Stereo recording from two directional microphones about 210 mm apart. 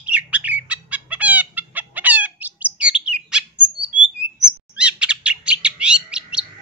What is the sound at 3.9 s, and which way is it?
Bird, 25° left (ahead or behind).